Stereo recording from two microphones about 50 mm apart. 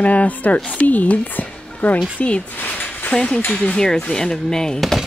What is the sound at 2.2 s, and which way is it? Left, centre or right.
Speech, left.